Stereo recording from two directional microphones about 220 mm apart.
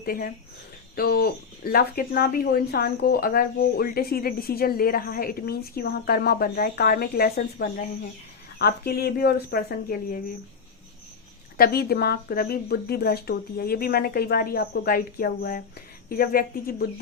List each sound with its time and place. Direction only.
0.0 s speech: 40° left (ahead or behind)
11.5 s speech: 45° left (ahead or behind)